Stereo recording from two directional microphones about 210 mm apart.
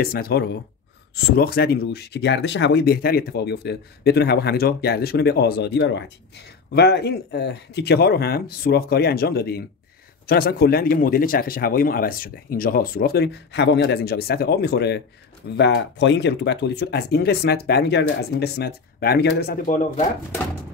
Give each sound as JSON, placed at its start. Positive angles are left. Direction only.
{"t": 0.0, "sound": "speech", "side_deg": 45}